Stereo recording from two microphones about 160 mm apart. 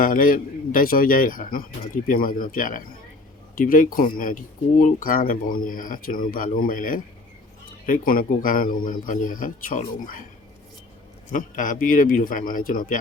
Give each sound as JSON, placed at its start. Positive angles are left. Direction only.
{"t": 0.0, "sound": "speech", "side_deg": 60}
{"t": 11.3, "sound": "speech", "side_deg": 55}